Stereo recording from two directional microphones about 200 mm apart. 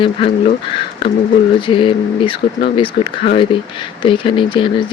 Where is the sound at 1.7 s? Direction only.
25° left (ahead or behind).